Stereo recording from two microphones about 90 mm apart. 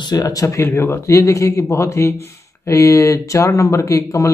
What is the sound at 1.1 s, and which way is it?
Speech, 40° left (ahead or behind).